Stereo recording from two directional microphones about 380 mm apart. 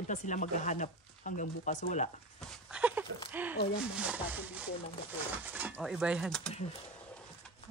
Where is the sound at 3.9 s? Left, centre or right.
Centre.